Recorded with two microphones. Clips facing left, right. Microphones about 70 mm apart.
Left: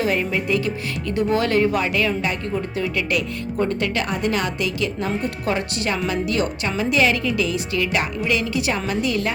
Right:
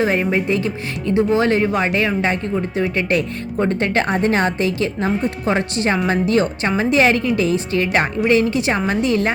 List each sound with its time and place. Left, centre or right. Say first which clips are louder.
0.0 s speech: right 4 dB; right